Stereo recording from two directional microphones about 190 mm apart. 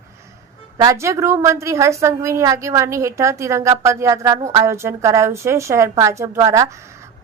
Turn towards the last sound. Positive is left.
turn(degrees=-15)  # may be behind; listen again after turning